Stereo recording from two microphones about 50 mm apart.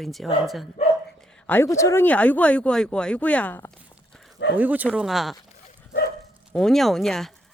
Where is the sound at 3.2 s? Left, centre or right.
Left.